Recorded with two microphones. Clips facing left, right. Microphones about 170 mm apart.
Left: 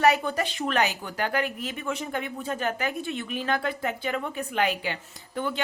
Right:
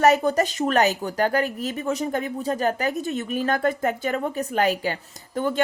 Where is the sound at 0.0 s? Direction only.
40° right (ahead or behind).